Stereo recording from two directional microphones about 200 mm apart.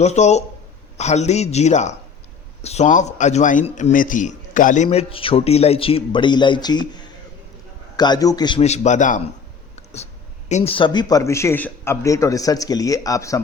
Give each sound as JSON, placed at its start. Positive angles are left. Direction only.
{"t": 0.0, "sound": "a man's voice", "side_deg": 35}
{"t": 9.7, "sound": "a sound", "side_deg": 30}
{"t": 10.5, "sound": "speech", "side_deg": 30}